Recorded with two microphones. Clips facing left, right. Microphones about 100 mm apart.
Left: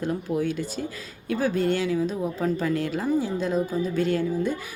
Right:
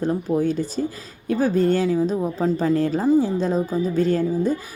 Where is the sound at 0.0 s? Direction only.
35° right (ahead or behind).